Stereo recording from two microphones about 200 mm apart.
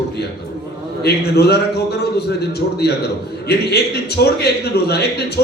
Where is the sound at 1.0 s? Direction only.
55° left (ahead or behind).